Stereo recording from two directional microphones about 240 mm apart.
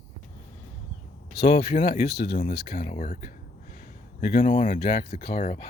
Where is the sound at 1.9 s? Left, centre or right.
Left.